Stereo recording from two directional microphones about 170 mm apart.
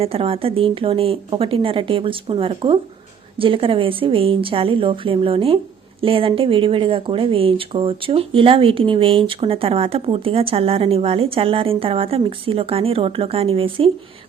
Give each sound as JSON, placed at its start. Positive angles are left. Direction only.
{"t": 0.0, "sound": "speech", "side_deg": -35}